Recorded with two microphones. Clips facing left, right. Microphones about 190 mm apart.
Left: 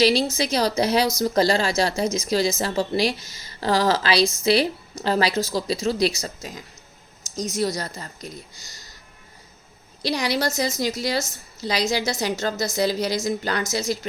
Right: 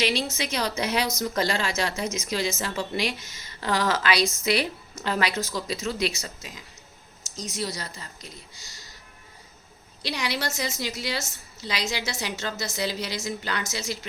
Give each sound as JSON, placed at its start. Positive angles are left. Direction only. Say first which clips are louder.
{"t": 0.0, "sound": "a woman's voice", "louder": "left 7 dB", "side_deg": 35}
{"t": 10.0, "sound": "a woman's voice", "louder": "left 6 dB", "side_deg": 40}